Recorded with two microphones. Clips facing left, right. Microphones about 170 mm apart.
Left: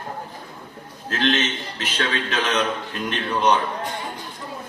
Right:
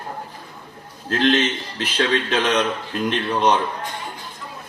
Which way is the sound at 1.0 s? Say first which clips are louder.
Right 4 dB; 35° right (ahead or behind).